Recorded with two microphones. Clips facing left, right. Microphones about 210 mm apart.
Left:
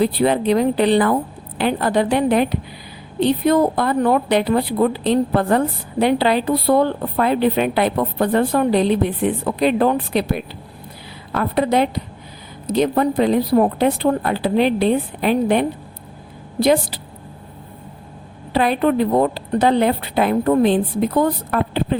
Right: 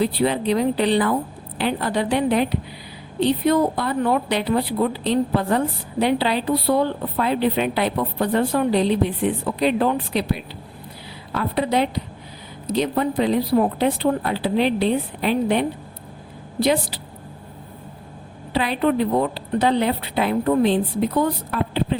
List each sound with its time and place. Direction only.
0.0 s a woman's voice: 50° left (ahead or behind)
18.5 s a woman's voice: 50° left (ahead or behind)